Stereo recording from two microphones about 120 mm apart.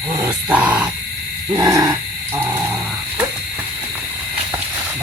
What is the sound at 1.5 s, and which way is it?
Speech, 25° right (ahead or behind).